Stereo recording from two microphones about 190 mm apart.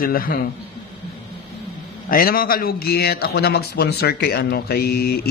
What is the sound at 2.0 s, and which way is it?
A man's voice, 50° left (ahead or behind).